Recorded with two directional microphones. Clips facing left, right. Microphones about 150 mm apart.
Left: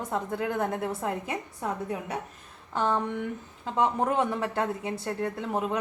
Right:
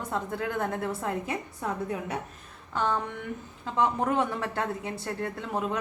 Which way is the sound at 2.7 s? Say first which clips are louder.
Left 2 dB; 20° left (ahead or behind).